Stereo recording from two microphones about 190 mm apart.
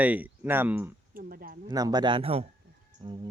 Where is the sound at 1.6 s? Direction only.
20° right (ahead or behind).